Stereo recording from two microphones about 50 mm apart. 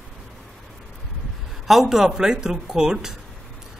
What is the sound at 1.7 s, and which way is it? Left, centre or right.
Speech, centre.